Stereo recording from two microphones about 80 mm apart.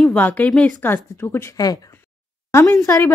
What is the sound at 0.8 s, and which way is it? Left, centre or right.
Speech, left.